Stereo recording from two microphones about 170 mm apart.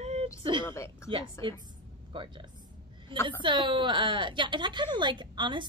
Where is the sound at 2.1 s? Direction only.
30° right (ahead or behind).